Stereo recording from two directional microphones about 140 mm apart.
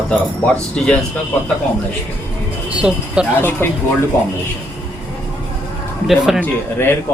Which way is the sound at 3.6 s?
15° left (ahead or behind).